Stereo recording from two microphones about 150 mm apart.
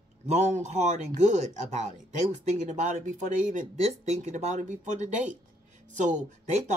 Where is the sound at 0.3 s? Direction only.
50° right (ahead or behind).